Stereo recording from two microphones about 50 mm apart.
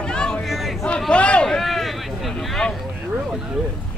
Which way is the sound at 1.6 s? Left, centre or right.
Centre.